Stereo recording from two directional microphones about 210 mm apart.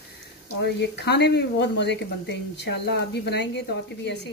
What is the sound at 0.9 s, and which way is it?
Speech, 55° left (ahead or behind).